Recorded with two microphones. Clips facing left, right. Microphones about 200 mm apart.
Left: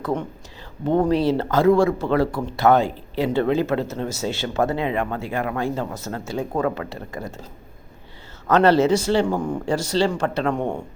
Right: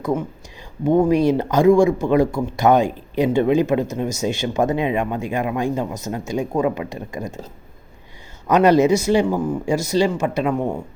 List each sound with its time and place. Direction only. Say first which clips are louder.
0.0 s speech: right 3 dB; 5° right (ahead or behind)
8.4 s speech: right 2 dB; 15° right (ahead or behind)